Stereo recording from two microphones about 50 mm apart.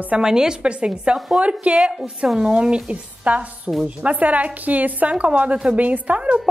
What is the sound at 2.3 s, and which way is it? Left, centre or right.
A woman's voice, centre.